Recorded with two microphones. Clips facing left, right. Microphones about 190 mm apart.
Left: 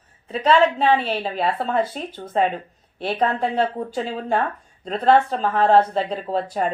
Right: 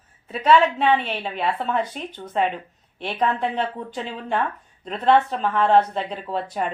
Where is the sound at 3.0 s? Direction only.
40° left (ahead or behind).